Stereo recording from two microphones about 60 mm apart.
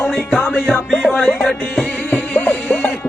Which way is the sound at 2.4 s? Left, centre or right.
Left.